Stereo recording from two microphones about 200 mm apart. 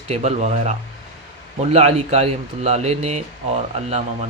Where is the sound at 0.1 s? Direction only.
35° right (ahead or behind).